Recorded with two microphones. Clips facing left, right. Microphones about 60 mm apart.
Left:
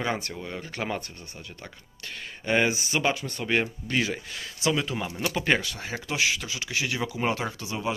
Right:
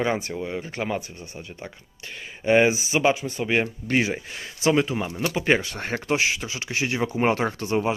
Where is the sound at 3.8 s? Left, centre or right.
Right.